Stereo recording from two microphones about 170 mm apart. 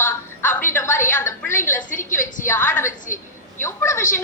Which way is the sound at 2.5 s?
10° left (ahead or behind).